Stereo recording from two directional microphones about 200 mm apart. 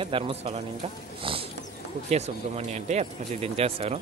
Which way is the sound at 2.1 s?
35° right (ahead or behind).